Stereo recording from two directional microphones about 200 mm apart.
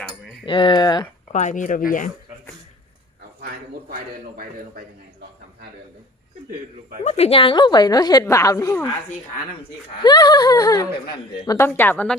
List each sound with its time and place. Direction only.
0.4 s a woman's voice: 25° left (ahead or behind)
1.3 s speech: 35° left (ahead or behind)
3.8 s a man's voice: 45° right (ahead or behind)
7.0 s a woman's voice: 30° left (ahead or behind); by 8.9 s 15° left (ahead or behind)
10.0 s a woman's voice: 20° left (ahead or behind)